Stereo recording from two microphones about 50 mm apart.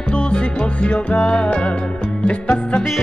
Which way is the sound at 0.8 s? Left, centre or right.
Left.